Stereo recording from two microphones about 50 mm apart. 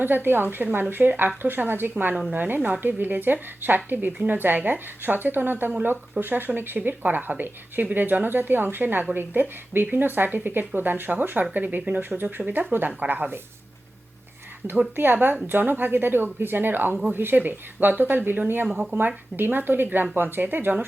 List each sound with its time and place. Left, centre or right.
0.0 s speech: right
14.9 s speech: right
18.7 s speech: centre
18.9 s speech: right